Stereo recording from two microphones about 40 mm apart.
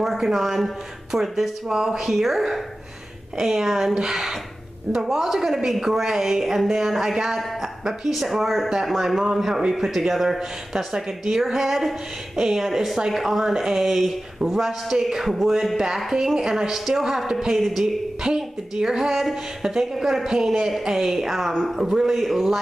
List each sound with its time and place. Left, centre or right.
0.0 s speech: centre
16.3 s speech: centre
17.6 s speech: centre
18.2 s speech: centre